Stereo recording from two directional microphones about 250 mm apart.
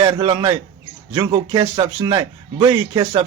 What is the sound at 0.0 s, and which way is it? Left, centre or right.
A man's voice, centre.